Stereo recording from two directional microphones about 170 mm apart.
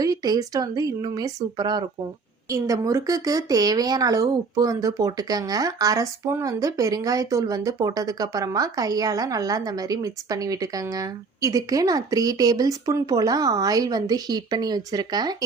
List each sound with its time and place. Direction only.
0.0 s speech: 20° right (ahead or behind)